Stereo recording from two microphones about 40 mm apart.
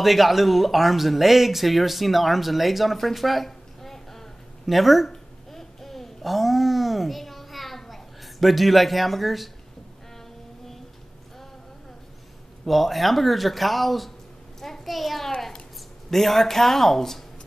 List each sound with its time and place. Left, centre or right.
0.0 s speech: centre
4.6 s speech: centre
5.1 s babbling: centre
12.6 s speech: centre
14.6 s a sound: centre
16.1 s speech: centre